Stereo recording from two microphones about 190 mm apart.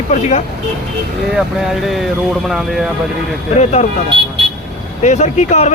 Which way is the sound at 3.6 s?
35° left (ahead or behind).